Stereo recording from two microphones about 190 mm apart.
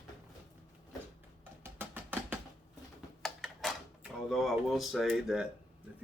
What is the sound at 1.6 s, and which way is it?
Music, 10° right (ahead or behind).